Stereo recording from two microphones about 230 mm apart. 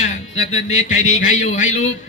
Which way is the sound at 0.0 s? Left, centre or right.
Left.